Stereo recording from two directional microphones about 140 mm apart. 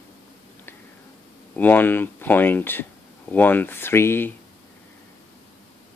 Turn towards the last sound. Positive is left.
turn(degrees=15)  # may be behind; listen again after turning